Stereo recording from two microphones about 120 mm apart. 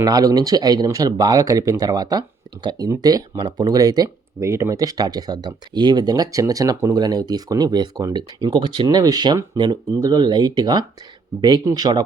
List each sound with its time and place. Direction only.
0.0 s speech: 30° right (ahead or behind)